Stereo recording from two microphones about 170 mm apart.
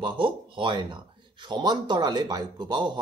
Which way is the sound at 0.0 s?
30° right (ahead or behind).